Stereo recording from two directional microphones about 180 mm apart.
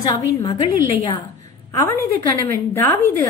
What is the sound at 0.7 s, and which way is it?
A woman's voice, 20° left (ahead or behind).